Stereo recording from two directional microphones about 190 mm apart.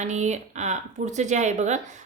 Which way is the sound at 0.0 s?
40° right (ahead or behind).